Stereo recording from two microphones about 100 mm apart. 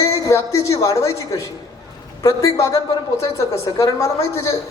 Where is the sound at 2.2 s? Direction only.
30° left (ahead or behind).